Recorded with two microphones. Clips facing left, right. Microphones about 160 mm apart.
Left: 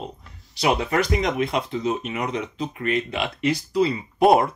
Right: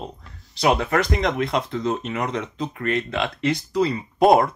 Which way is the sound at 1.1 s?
10° left (ahead or behind).